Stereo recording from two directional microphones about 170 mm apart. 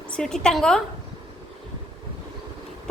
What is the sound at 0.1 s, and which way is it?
Speech, 5° left (ahead or behind).